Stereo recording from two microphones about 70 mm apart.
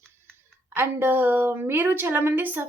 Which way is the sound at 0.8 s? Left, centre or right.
Right.